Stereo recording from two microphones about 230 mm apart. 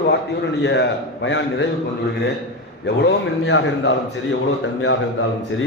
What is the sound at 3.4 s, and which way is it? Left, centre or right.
Speech, left.